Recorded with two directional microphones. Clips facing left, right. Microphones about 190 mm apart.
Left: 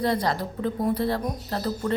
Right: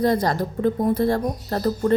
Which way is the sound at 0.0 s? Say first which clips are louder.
Right 4 dB; 45° right (ahead or behind).